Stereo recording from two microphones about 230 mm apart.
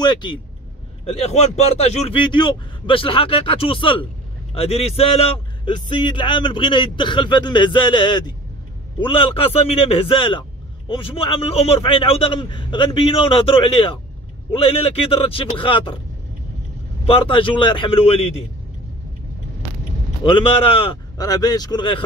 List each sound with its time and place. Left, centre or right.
0.0 s a man's voice: centre
17.0 s a man's voice: left
20.2 s a man's voice: left